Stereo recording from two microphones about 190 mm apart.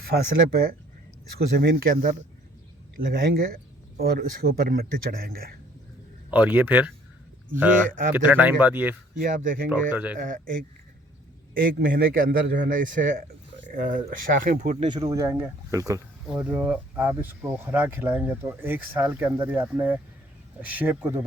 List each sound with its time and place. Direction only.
0.1 s speech: 60° right (ahead or behind)
1.4 s speech: 55° right (ahead or behind)
6.3 s speech: 10° right (ahead or behind)
8.1 s speech: 10° right (ahead or behind)
9.1 s speech: 45° right (ahead or behind)
9.6 s speech: 10° right (ahead or behind)
10.2 s speech: 45° right (ahead or behind)
14.8 s speech: 25° right (ahead or behind)